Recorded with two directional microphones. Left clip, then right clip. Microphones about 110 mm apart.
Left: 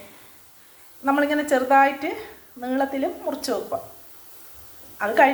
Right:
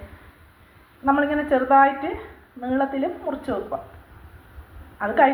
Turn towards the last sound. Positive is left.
turn(degrees=25)  # may be behind; listen again after turning